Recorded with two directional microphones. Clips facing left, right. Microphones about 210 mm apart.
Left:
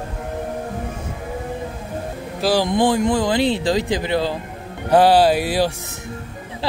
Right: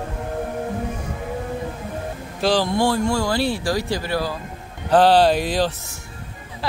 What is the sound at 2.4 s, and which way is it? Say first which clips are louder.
Speech: left 2 dB; 15° left (ahead or behind).